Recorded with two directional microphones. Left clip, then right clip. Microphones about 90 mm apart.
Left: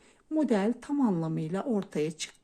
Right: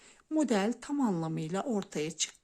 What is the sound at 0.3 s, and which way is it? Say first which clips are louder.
A woman's voice: left 2 dB; 40° right (ahead or behind).